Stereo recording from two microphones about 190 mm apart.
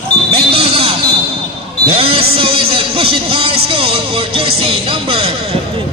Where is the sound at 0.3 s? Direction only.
30° right (ahead or behind).